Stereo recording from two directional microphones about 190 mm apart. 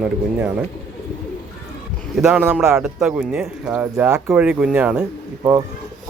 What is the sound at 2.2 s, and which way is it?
Speech, 5° right (ahead or behind).